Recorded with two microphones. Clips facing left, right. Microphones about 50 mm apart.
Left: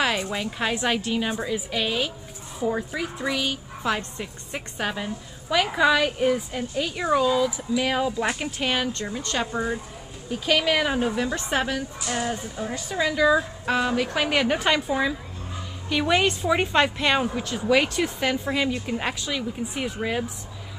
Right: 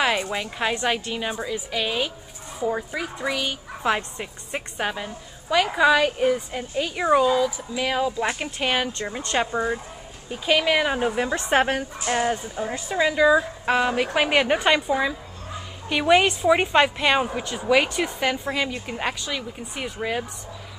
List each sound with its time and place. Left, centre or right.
0.0 s a woman's voice: centre
3.8 s a woman's voice: centre
4.9 s a woman's voice: centre
7.1 s a woman's voice: centre
7.3 s a woman's voice: centre
8.4 s a woman's voice: centre
9.1 s a woman's voice: right
11.1 s speech: right
12.5 s a woman's voice: centre